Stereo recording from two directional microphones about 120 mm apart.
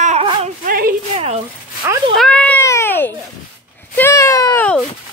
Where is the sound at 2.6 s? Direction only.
20° left (ahead or behind).